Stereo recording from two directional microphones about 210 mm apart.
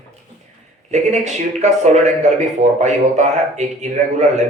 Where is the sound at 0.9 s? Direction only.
35° right (ahead or behind).